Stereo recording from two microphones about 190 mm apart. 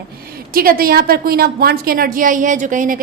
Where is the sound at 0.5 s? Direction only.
50° right (ahead or behind).